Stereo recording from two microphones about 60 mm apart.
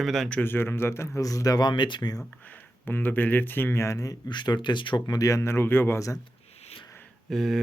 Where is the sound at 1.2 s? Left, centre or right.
Left.